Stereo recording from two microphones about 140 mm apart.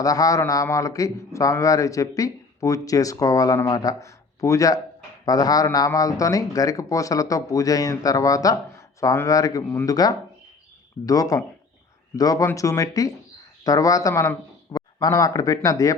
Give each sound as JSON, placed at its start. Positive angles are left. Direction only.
{"t": 0.0, "sound": "a man's voice", "side_deg": 25}